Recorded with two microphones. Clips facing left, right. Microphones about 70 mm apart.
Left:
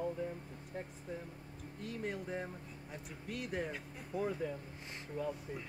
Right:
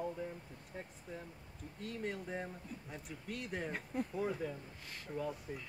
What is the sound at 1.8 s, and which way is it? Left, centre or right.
Speech, centre.